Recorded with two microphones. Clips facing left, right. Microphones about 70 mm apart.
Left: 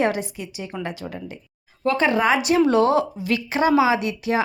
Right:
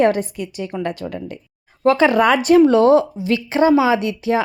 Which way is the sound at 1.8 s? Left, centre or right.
Right.